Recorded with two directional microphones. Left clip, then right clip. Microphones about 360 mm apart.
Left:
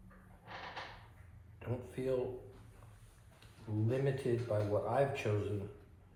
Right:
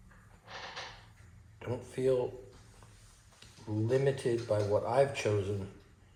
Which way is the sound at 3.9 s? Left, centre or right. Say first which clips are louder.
Right 6 dB; right.